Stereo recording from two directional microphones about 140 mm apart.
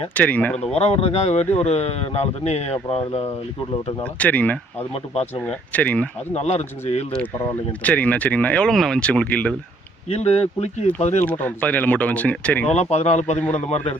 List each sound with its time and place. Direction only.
0.1 s speech: 10° left (ahead or behind)
0.6 s speech: 50° left (ahead or behind)
4.0 s speech: 10° left (ahead or behind)
6.3 s speech: 50° left (ahead or behind)
7.7 s speech: 10° left (ahead or behind)
10.2 s speech: 50° left (ahead or behind)
11.2 s speech: 10° left (ahead or behind)
12.7 s speech: 50° left (ahead or behind)